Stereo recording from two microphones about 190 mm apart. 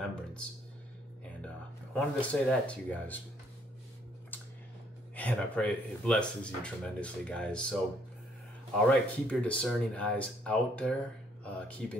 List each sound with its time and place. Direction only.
0.0 s a sound: 5° left (ahead or behind)
2.0 s speech: 5° left (ahead or behind)
5.1 s speech: 5° left (ahead or behind)
8.8 s speech: 5° left (ahead or behind)